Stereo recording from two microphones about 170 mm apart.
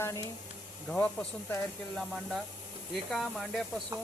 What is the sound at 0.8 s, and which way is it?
Speech, 5° left (ahead or behind).